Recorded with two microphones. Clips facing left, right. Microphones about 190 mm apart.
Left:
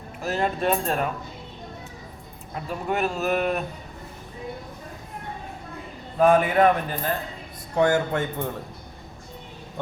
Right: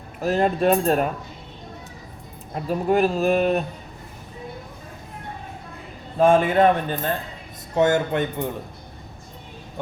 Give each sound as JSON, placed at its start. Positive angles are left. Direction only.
{"t": 0.2, "sound": "speech", "side_deg": -40}
{"t": 2.6, "sound": "speech", "side_deg": -35}
{"t": 6.1, "sound": "speech", "side_deg": -25}